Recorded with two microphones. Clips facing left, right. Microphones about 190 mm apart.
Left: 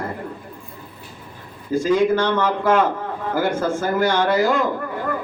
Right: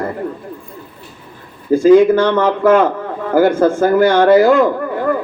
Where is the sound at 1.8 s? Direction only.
55° right (ahead or behind).